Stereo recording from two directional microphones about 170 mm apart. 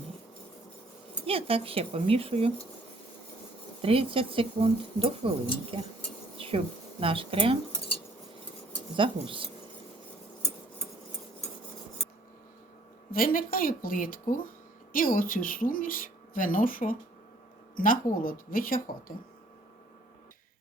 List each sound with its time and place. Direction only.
1.3 s speech: 35° right (ahead or behind)
3.8 s speech: 35° right (ahead or behind)
6.3 s insect: 35° right (ahead or behind)
7.0 s speech: 30° right (ahead or behind)
9.0 s speech: 30° right (ahead or behind)
13.1 s speech: 55° left (ahead or behind)